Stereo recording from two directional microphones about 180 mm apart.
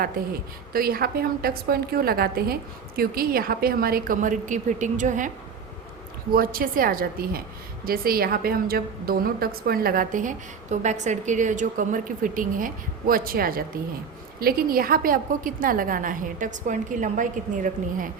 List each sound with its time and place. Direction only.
0.2 s a woman's voice: 55° right (ahead or behind)
6.3 s a woman's voice: 55° right (ahead or behind)